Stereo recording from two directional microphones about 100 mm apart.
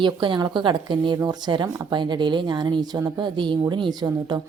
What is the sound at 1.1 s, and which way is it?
Speech, 40° right (ahead or behind).